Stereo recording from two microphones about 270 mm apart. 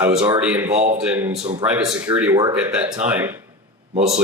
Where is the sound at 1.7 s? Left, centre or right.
Centre.